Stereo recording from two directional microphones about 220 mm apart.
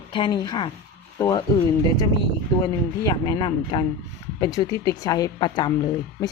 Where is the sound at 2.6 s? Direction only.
20° left (ahead or behind).